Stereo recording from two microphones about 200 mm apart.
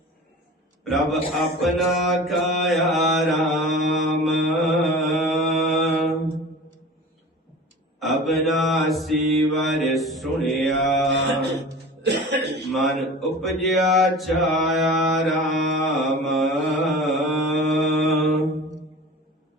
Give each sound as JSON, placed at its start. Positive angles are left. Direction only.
{"t": 0.9, "sound": "mantra", "side_deg": 0}
{"t": 7.9, "sound": "mantra", "side_deg": 0}
{"t": 12.0, "sound": "cough", "side_deg": -60}
{"t": 12.7, "sound": "mantra", "side_deg": 0}